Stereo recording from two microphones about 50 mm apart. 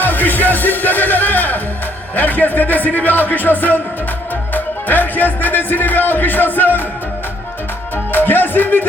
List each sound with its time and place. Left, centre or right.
0.0 s music: left
2.1 s speech: left
8.1 s music: left